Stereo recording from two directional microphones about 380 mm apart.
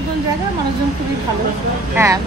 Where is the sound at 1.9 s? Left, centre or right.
Centre.